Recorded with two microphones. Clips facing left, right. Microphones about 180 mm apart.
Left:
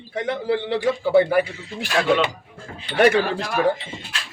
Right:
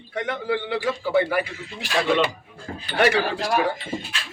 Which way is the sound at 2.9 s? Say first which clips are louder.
Left 3 dB; 50° left (ahead or behind).